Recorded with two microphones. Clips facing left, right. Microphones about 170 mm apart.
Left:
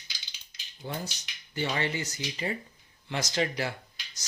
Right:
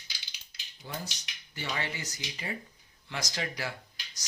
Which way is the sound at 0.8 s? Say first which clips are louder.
Left 4 dB; 30° left (ahead or behind).